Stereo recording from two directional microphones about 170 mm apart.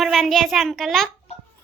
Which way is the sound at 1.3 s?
40° left (ahead or behind).